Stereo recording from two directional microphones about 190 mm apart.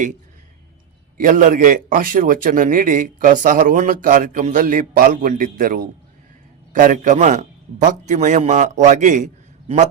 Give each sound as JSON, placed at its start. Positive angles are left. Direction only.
{"t": 1.2, "sound": "a man's voice", "side_deg": -45}